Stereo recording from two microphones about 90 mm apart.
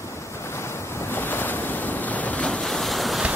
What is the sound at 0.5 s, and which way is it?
Waves, 30° left (ahead or behind).